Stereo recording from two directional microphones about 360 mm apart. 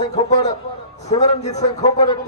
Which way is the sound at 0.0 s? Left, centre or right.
Centre.